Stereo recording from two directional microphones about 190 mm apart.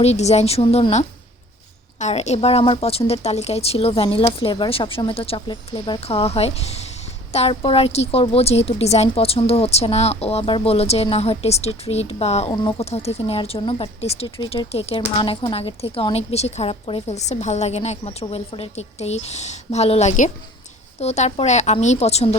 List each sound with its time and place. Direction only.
0.0 s speech: 35° left (ahead or behind)